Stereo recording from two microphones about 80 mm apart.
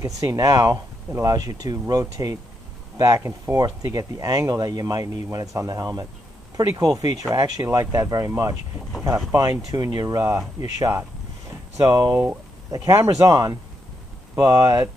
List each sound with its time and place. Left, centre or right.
0.0 s speech: right
7.7 s speech: right
9.7 s speech: right
12.1 s speech: centre
12.7 s speech: right